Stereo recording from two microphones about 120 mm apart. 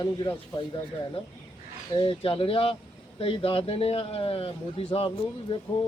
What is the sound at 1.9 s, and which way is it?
Speech, 50° left (ahead or behind).